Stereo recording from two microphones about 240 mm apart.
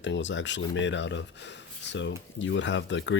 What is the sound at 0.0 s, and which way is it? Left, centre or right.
Speech, left.